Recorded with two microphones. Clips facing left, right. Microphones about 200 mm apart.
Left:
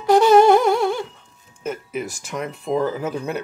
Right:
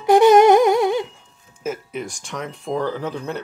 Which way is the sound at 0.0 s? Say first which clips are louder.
Right 1 dB; 20° right (ahead or behind).